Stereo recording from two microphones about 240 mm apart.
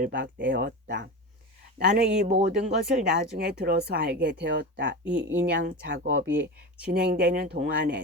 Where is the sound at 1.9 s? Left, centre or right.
Right.